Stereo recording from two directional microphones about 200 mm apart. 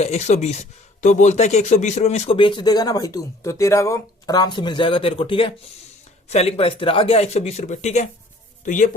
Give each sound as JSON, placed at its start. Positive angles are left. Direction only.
{"t": 0.0, "sound": "speech", "side_deg": 35}